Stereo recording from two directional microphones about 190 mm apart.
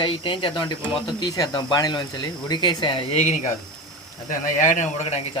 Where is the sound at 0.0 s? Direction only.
25° left (ahead or behind).